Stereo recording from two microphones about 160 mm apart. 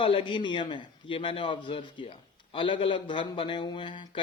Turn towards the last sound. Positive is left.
turn(degrees=30)  # may be behind; listen again after turning